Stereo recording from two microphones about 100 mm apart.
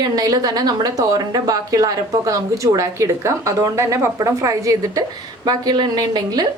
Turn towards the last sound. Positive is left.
turn(degrees=-40)  # may be behind; listen again after turning